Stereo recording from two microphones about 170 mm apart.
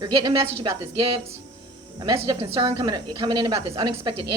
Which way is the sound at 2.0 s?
25° right (ahead or behind).